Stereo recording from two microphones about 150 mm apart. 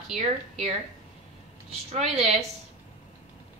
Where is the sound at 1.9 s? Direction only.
45° right (ahead or behind).